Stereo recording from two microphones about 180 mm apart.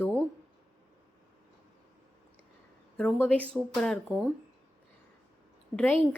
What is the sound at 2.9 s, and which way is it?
Speech, 5° left (ahead or behind).